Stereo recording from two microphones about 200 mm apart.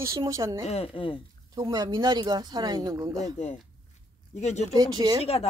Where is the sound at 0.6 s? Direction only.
30° left (ahead or behind).